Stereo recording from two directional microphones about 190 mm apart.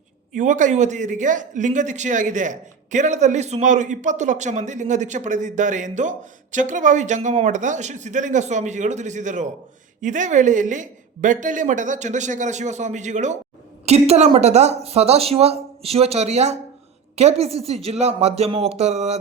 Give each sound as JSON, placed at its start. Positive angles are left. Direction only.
{"t": 0.3, "sound": "speech", "side_deg": -40}